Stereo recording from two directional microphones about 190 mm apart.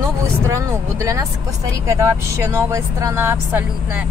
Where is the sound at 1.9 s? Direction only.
15° right (ahead or behind).